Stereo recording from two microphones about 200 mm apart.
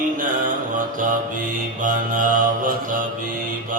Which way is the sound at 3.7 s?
40° right (ahead or behind).